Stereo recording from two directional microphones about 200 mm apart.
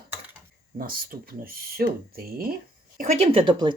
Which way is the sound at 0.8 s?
45° right (ahead or behind).